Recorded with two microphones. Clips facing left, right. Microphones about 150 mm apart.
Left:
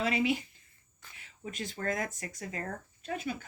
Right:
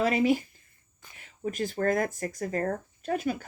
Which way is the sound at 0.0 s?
45° right (ahead or behind).